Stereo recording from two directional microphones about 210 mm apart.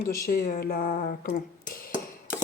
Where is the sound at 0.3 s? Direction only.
40° left (ahead or behind).